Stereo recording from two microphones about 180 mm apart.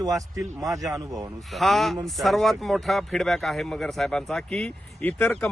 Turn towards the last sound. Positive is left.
turn(degrees=10)  # may be behind; listen again after turning